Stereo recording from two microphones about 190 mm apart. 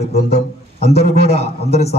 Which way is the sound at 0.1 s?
55° left (ahead or behind).